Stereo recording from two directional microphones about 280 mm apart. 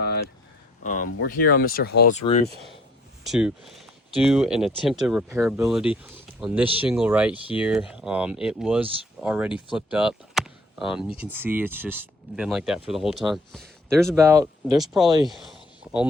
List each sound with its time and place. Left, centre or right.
0.9 s speech: left
3.2 s speech: centre